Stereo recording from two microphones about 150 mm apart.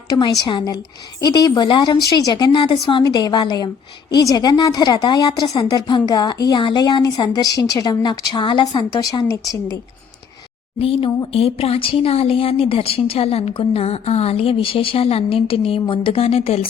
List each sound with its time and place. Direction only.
0.1 s speech: 30° left (ahead or behind)
10.8 s speech: 40° left (ahead or behind)